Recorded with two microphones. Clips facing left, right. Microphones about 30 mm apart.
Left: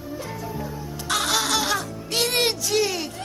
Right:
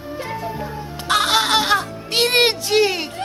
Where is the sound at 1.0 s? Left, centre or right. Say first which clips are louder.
Right 6 dB; right.